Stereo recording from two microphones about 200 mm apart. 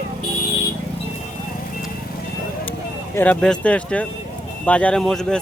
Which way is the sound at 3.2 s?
5° left (ahead or behind).